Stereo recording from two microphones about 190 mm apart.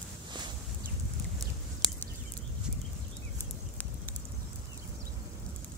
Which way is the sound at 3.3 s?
10° left (ahead or behind).